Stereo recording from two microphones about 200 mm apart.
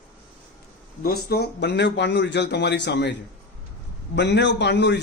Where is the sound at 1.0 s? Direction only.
50° left (ahead or behind).